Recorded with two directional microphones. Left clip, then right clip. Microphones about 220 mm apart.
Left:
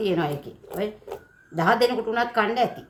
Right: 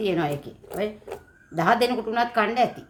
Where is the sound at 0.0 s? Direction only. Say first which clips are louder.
Even; 10° right (ahead or behind).